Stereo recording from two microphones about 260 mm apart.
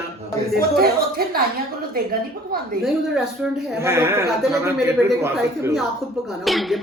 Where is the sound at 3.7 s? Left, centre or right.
Centre.